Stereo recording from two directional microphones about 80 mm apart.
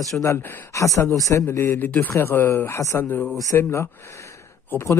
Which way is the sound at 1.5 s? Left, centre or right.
Left.